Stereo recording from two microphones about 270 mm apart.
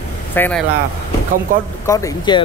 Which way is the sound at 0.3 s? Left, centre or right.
Centre.